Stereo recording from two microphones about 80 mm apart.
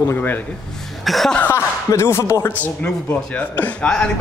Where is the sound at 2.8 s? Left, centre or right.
Centre.